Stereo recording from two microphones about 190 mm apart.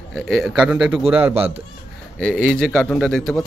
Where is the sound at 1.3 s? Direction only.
30° right (ahead or behind).